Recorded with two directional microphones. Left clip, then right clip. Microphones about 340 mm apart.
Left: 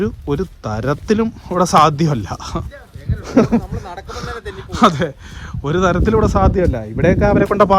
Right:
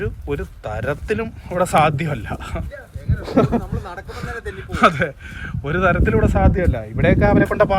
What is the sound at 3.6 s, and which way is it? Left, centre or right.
Speech, left.